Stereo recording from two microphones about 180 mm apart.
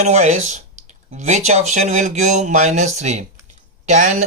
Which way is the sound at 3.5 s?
40° right (ahead or behind).